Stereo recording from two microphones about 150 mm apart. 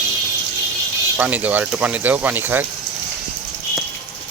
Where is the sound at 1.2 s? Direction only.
10° right (ahead or behind).